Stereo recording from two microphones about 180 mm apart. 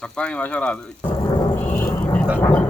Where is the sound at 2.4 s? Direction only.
5° left (ahead or behind).